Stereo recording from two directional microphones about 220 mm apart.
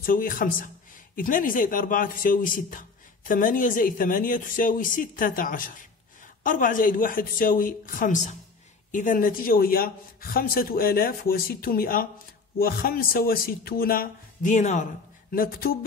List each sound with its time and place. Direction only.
0.0 s speech: 40° left (ahead or behind)